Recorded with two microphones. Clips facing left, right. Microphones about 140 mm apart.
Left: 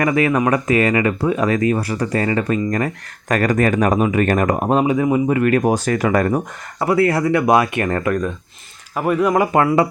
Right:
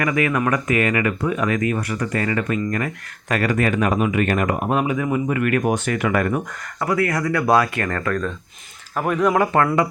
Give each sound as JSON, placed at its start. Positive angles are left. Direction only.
{"t": 0.0, "sound": "speech", "side_deg": 30}
{"t": 4.7, "sound": "speech", "side_deg": 30}